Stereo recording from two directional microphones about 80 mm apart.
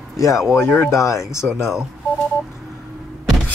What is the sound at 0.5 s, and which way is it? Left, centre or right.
Speech, left.